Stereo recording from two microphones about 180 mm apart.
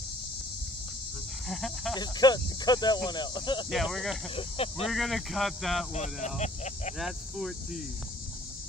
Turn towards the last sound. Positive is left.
turn(degrees=0)  # may be behind; listen again after turning